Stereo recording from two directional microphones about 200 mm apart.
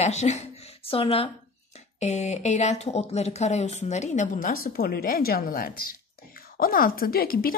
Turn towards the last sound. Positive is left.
turn(degrees=50)  # may be behind; listen again after turning